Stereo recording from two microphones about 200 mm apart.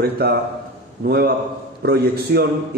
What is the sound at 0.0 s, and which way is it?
A man's voice, 55° right (ahead or behind).